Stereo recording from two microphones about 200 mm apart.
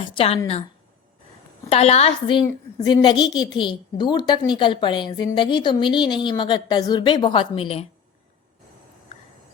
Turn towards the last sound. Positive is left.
turn(degrees=30)  # may be behind; listen again after turning